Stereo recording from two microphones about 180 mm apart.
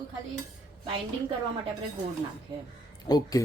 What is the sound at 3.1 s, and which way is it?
Speech, 20° left (ahead or behind).